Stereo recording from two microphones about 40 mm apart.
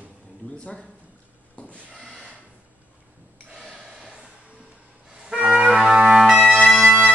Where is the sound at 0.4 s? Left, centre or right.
Left.